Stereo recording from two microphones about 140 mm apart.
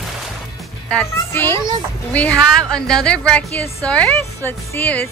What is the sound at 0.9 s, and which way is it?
A woman's voice, 15° left (ahead or behind).